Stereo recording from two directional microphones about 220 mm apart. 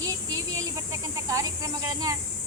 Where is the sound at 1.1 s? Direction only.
15° right (ahead or behind).